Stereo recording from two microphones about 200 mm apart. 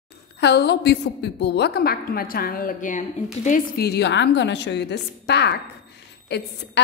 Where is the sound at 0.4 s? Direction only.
55° left (ahead or behind).